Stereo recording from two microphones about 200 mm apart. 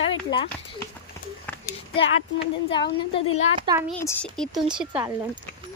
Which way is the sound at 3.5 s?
25° right (ahead or behind).